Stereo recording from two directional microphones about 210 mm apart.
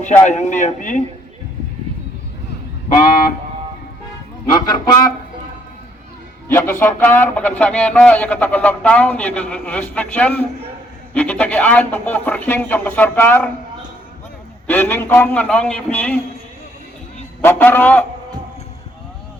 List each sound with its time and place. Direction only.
0.3 s a man's voice: 35° left (ahead or behind)
4.5 s a man's voice: 20° left (ahead or behind)
6.5 s a man's voice: 10° left (ahead or behind)
14.7 s a man's voice: 10° left (ahead or behind)
17.4 s a man's voice: 10° left (ahead or behind)